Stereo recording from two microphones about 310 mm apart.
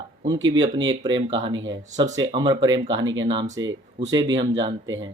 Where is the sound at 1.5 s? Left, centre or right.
Right.